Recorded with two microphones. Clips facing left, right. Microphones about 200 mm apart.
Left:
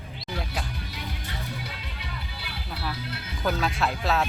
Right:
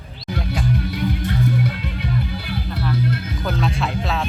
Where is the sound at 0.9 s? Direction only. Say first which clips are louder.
Right 14 dB; 55° right (ahead or behind).